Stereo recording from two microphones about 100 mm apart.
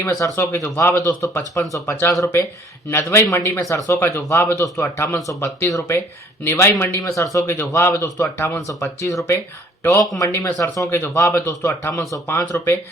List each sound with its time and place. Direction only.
0.3 s speech: 25° left (ahead or behind)